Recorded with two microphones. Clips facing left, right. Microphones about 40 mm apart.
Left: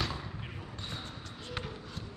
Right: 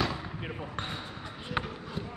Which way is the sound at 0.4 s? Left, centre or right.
Right.